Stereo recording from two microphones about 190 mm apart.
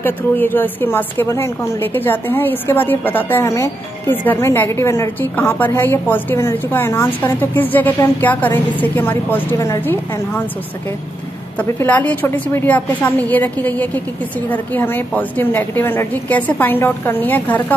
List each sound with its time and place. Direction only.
0.0 s a woman's voice: 10° left (ahead or behind)
11.8 s a woman's voice: 10° left (ahead or behind)